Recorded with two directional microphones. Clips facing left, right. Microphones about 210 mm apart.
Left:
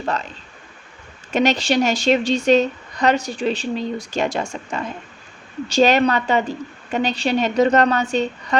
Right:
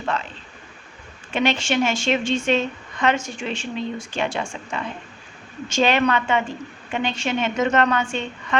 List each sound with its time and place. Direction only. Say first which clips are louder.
0.0 s speech: left 2 dB; 40° left (ahead or behind)
1.3 s a woman's voice: left 4 dB; 40° left (ahead or behind)